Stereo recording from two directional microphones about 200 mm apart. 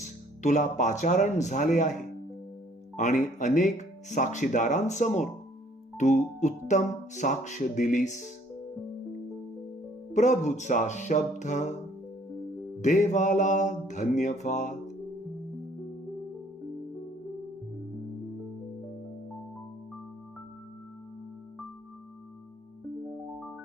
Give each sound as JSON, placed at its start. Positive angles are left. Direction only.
{"t": 0.0, "sound": "speech", "side_deg": 35}
{"t": 10.1, "sound": "speech", "side_deg": 35}
{"t": 12.8, "sound": "speech", "side_deg": 35}